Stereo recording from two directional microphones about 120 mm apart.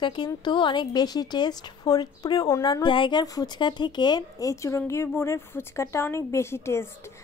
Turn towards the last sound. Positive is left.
turn(degrees=20)  # may be behind; listen again after turning